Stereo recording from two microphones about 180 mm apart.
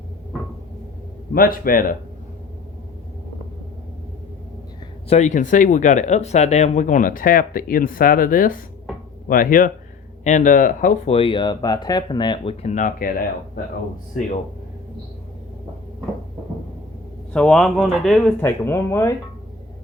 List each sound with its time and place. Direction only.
1.3 s speech: 55° left (ahead or behind)
5.0 s speech: 40° left (ahead or behind); by 12.5 s 25° left (ahead or behind)
12.6 s speech: 45° left (ahead or behind)
17.3 s speech: 5° left (ahead or behind)
18.3 s speech: 15° left (ahead or behind)